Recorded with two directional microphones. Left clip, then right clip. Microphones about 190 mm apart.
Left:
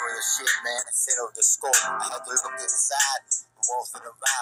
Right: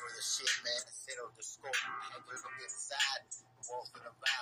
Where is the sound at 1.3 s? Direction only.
50° left (ahead or behind).